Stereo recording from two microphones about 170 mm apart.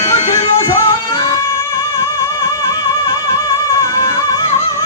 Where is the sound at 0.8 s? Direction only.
15° left (ahead or behind).